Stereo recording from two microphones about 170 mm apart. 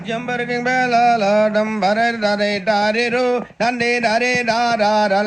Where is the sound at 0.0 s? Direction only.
Centre (ahead or behind).